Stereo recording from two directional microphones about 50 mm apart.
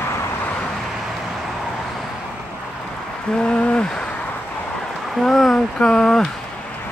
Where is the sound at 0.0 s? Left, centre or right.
Left.